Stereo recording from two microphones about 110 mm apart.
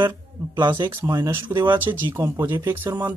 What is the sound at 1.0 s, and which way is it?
Speech, 35° right (ahead or behind).